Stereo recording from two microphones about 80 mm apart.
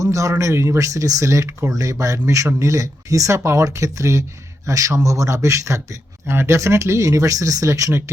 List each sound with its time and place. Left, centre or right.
0.0 s speech: right